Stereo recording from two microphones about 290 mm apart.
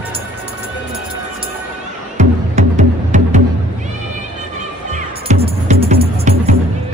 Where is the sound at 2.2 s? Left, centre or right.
Right.